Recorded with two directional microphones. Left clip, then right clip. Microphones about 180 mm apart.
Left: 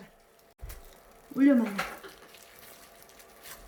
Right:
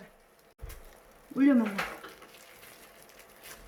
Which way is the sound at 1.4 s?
10° left (ahead or behind).